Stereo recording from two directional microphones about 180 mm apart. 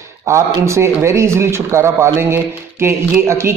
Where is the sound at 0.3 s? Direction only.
15° right (ahead or behind).